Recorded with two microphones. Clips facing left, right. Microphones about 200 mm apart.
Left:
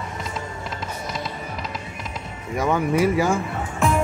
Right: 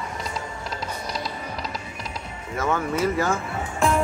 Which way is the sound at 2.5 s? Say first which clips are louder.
Left 4 dB; 15° left (ahead or behind).